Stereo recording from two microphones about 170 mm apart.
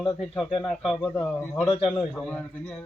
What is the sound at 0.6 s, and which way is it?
Speech, centre (ahead or behind).